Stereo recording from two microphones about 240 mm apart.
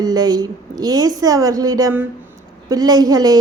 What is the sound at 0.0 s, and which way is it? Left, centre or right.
A woman's voice, centre.